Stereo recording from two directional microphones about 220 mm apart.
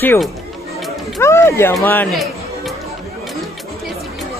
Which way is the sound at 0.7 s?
Centre (ahead or behind).